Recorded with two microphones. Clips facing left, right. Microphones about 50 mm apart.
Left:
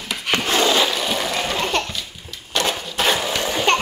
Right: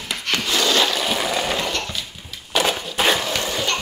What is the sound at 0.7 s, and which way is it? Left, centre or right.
Toilet flush, centre.